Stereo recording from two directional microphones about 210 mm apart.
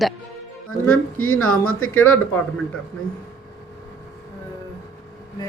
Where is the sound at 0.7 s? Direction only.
90° left.